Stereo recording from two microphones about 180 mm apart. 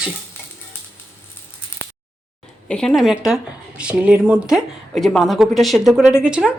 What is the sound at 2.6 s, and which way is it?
Speech, 5° left (ahead or behind).